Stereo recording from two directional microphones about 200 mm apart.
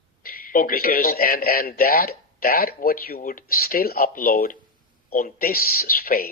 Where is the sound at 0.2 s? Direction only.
45° left (ahead or behind).